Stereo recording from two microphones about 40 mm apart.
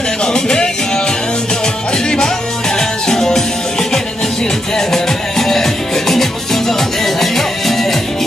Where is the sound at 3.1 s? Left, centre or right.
Centre.